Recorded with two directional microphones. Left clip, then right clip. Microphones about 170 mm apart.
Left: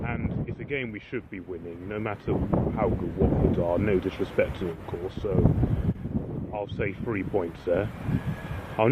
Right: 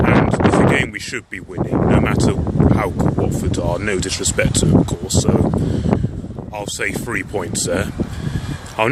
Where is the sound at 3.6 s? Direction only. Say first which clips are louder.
Right 5 dB; 40° right (ahead or behind).